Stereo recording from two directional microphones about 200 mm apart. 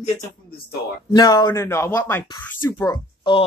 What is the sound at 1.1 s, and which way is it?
A man's voice, 20° left (ahead or behind).